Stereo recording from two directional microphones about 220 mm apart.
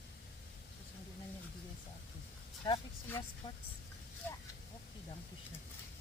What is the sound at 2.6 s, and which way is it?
Speech, 20° left (ahead or behind).